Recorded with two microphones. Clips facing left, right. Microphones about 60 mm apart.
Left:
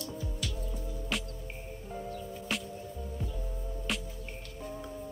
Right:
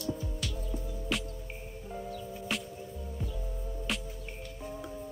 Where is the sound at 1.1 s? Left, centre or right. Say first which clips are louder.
Right 2 dB; centre.